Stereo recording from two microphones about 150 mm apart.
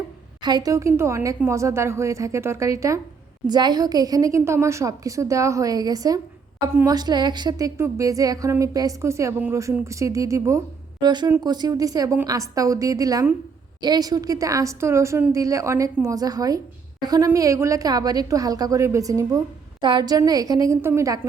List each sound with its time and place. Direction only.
0.4 s a woman's voice: 25° right (ahead or behind)